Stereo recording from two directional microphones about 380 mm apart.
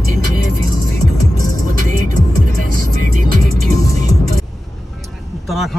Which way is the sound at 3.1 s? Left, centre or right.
Right.